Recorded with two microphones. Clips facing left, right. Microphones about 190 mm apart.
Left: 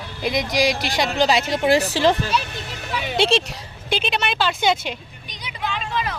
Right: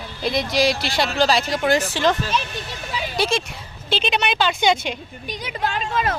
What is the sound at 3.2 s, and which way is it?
Speech, 30° left (ahead or behind).